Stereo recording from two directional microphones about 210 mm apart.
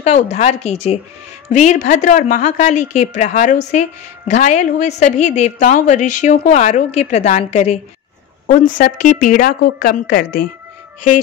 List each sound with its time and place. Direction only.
0.0 s a woman's voice: 30° left (ahead or behind)